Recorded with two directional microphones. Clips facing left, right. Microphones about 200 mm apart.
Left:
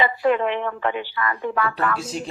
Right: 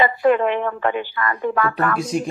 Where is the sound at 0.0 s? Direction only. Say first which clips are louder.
Right 3 dB; 50° right (ahead or behind).